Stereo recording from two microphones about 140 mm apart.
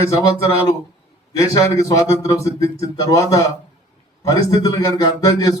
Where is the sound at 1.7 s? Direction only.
25° left (ahead or behind).